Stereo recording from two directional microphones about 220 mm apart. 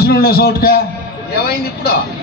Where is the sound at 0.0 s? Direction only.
45° left (ahead or behind).